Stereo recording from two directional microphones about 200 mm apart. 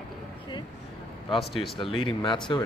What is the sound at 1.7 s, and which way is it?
Speech, 25° left (ahead or behind).